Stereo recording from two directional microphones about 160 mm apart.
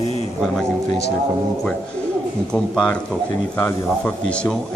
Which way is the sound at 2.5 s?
5° left (ahead or behind).